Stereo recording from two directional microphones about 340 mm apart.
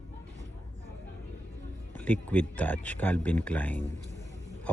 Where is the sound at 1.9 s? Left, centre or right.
Centre.